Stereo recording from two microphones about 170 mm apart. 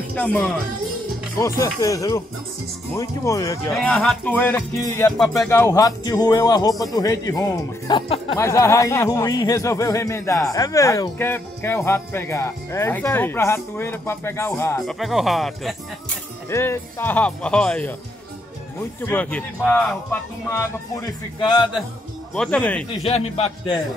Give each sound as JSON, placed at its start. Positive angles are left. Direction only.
{"t": 0.1, "sound": "speech", "side_deg": 10}
{"t": 1.4, "sound": "speech", "side_deg": 20}
{"t": 3.7, "sound": "speech", "side_deg": 5}
{"t": 14.8, "sound": "speech", "side_deg": 0}
{"t": 16.4, "sound": "speech", "side_deg": 15}
{"t": 19.0, "sound": "speech", "side_deg": 10}
{"t": 21.0, "sound": "speech", "side_deg": 25}
{"t": 22.3, "sound": "speech", "side_deg": 5}
{"t": 23.0, "sound": "a man's voice", "side_deg": 35}